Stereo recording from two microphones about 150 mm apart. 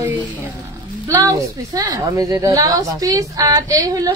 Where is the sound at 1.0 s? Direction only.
20° right (ahead or behind).